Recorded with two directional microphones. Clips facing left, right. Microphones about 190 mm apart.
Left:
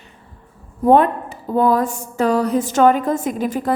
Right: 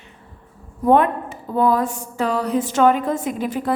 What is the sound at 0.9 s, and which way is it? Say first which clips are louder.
A woman's voice: left 2 dB; 35° left (ahead or behind).